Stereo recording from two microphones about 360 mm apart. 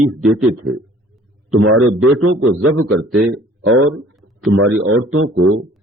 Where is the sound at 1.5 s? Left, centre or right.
Right.